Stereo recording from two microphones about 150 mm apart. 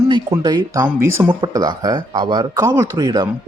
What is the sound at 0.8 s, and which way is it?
Speech, 15° right (ahead or behind).